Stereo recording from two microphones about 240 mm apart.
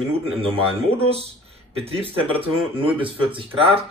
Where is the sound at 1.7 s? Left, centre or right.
Right.